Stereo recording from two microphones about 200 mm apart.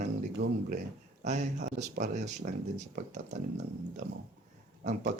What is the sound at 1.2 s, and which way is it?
Speech, 35° right (ahead or behind).